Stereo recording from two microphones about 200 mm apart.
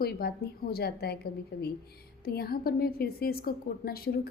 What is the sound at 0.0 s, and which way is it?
A woman's voice, 50° left (ahead or behind).